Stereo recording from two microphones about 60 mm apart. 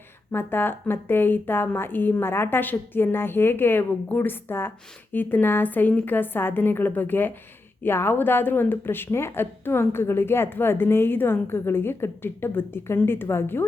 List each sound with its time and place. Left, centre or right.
0.3 s a woman's voice: left